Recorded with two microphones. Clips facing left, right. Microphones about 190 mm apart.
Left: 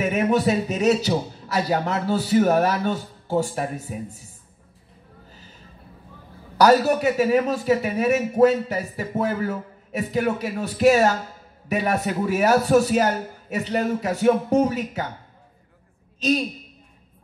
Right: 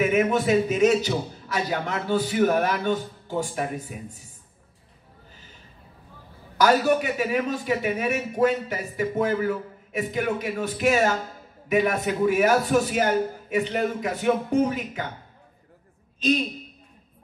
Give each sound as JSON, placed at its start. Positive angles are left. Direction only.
{"t": 0.0, "sound": "a man's voice", "side_deg": 35}
{"t": 6.6, "sound": "a man's voice", "side_deg": 40}